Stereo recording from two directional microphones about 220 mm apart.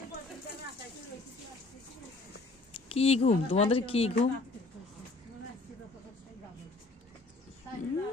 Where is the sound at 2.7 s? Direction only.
25° left (ahead or behind).